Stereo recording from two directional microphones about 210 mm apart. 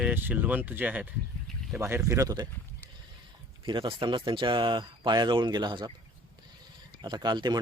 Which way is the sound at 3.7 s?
25° right (ahead or behind).